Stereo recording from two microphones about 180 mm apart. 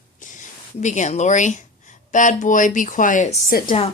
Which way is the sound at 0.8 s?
40° left (ahead or behind).